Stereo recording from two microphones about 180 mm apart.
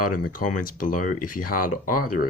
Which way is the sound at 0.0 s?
50° left (ahead or behind).